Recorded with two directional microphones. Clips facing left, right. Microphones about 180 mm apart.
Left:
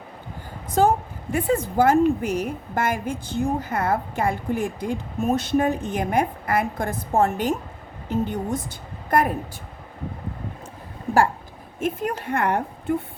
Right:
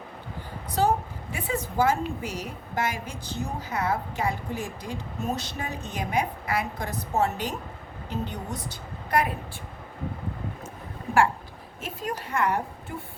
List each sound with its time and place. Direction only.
1.3 s a woman's voice: 55° left (ahead or behind)
11.8 s a woman's voice: 55° left (ahead or behind)